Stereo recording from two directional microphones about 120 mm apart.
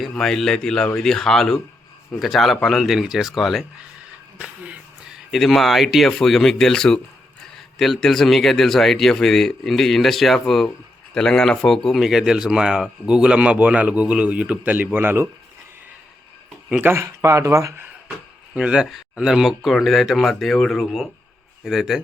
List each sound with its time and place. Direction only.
0.0 s a man's voice: 5° left (ahead or behind)
4.4 s a sound: 10° right (ahead or behind)
5.3 s a man's voice: centre (ahead or behind); by 15.3 s 15° right (ahead or behind)
16.8 s speech: 20° right (ahead or behind)
18.5 s a man's voice: 5° right (ahead or behind)